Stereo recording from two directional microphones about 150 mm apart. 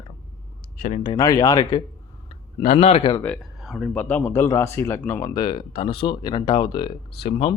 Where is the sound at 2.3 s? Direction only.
40° left (ahead or behind).